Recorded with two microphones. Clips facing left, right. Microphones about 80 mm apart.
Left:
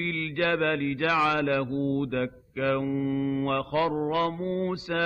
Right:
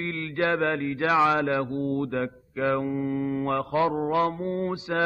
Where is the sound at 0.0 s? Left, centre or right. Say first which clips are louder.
Right 1 dB; right.